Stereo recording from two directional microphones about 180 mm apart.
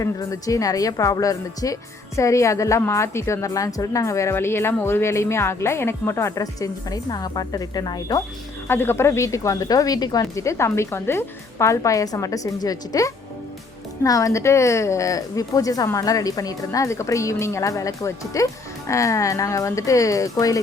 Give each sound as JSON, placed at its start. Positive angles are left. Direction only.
{"t": 0.0, "sound": "a woman's voice", "side_deg": 20}